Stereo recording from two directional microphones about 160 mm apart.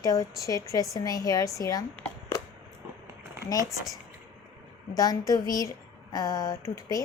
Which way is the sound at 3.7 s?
Centre (ahead or behind).